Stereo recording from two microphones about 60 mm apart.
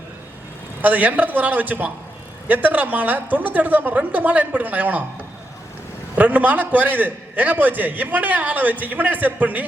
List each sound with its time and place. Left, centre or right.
0.8 s a man's voice: right
6.1 s a man's voice: right